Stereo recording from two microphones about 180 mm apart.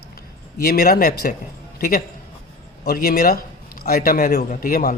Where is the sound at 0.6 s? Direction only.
55° left (ahead or behind).